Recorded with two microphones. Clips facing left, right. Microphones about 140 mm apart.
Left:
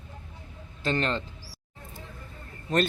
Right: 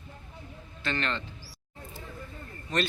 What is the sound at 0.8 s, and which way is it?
Speech, 40° left (ahead or behind).